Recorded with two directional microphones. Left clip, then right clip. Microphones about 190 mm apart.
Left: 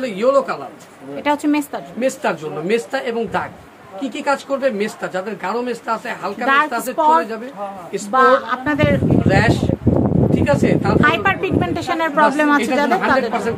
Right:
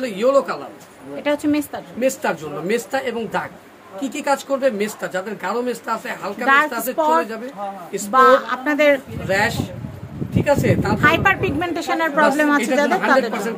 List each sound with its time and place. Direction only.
0.0 s a man's voice: 10° left (ahead or behind)
1.1 s a woman's voice: 20° left (ahead or behind)
2.0 s speech: centre (ahead or behind)